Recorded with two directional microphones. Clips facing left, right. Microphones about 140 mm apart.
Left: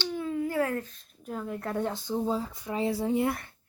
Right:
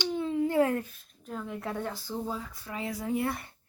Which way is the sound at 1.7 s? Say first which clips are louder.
Left 8 dB; 20° left (ahead or behind).